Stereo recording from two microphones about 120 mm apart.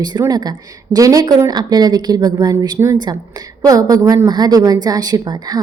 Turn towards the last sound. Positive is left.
turn(degrees=-35)  # may be behind; listen again after turning